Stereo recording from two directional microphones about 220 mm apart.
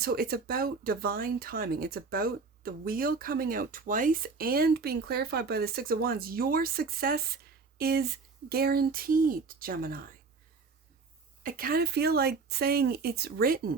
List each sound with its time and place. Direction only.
0.0 s speech: 45° right (ahead or behind)
11.4 s speech: 40° right (ahead or behind)